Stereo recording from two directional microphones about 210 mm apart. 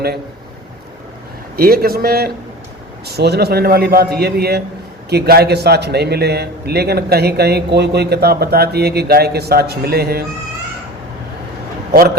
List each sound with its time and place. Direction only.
1.5 s a man's voice: 45° right (ahead or behind)